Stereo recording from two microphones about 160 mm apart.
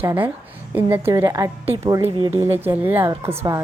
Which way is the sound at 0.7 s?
15° right (ahead or behind).